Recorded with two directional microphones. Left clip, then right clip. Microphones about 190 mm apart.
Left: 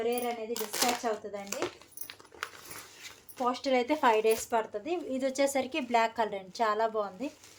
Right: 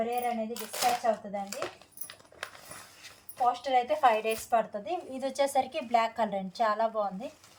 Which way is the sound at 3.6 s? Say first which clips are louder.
Even; 60° left (ahead or behind).